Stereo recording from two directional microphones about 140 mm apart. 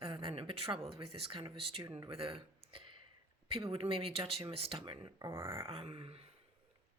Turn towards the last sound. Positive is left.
turn(degrees=-45)  # may be behind; listen again after turning